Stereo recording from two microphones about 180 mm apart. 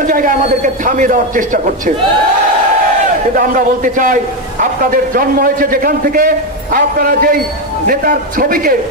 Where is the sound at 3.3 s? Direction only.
50° right (ahead or behind).